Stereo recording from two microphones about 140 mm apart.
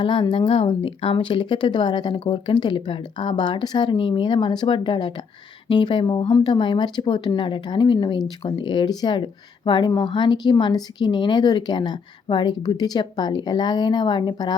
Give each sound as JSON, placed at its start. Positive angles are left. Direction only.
{"t": 0.0, "sound": "speech", "side_deg": 35}